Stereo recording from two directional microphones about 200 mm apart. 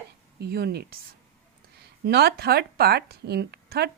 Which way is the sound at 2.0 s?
55° right (ahead or behind).